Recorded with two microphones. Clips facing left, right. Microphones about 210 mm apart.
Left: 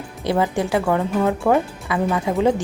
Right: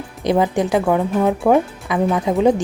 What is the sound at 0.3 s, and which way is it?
Speech, 15° right (ahead or behind).